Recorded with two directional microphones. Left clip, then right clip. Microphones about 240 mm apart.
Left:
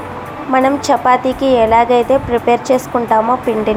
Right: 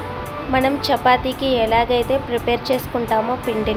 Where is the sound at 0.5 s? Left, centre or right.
Centre.